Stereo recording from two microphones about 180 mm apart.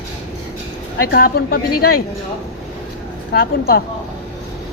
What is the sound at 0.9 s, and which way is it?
Speech, 55° left (ahead or behind).